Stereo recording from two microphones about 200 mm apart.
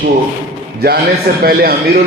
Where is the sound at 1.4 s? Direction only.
50° right (ahead or behind).